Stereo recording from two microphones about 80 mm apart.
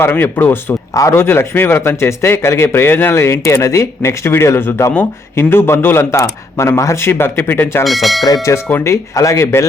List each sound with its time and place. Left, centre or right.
0.0 s speech: left
0.9 s speech: left
1.2 s speech: left
7.9 s speech: centre
8.5 s speech: left